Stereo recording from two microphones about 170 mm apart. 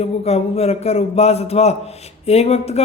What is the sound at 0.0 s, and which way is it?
Speech, 35° left (ahead or behind).